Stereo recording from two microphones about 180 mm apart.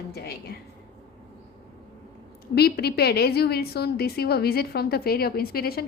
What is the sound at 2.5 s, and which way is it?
A woman's voice, 60° left (ahead or behind).